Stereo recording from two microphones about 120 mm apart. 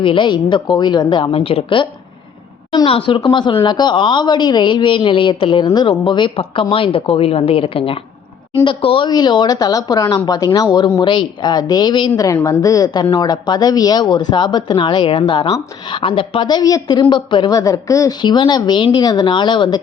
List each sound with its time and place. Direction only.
0.0 s speech: 45° left (ahead or behind)
9.0 s speech: 35° left (ahead or behind)
17.5 s a woman's voice: 30° left (ahead or behind)
18.2 s speech: 40° left (ahead or behind)